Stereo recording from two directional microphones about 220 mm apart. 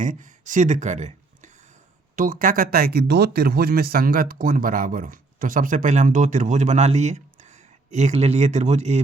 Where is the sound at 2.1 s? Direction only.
40° right (ahead or behind).